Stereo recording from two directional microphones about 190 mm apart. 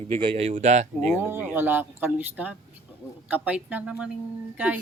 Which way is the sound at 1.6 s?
10° right (ahead or behind).